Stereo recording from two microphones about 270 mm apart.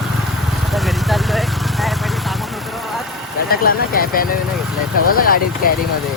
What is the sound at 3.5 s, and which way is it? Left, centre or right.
Speech, left.